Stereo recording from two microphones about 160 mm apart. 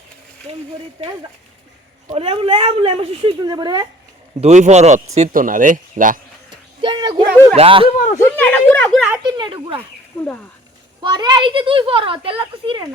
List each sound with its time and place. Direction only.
2.0 s speech: 40° right (ahead or behind)
4.4 s a man's voice: 45° right (ahead or behind)
6.8 s speech: 30° right (ahead or behind)
7.9 s speech: 50° left (ahead or behind)
8.2 s speech: 10° left (ahead or behind)
9.1 s speech: 25° right (ahead or behind)
10.2 s speech: 5° left (ahead or behind)
11.0 s speech: 25° right (ahead or behind)